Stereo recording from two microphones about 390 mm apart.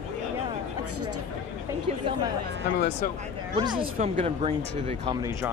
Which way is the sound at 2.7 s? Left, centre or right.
Left.